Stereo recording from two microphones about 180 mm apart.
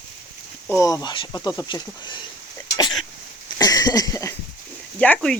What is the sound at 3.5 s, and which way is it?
Cough, 20° left (ahead or behind).